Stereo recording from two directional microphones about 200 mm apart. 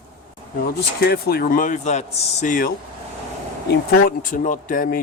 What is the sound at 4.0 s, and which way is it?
Speech, 45° left (ahead or behind).